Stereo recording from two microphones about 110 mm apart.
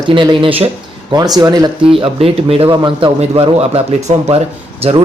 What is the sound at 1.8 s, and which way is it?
A man's voice, 55° right (ahead or behind).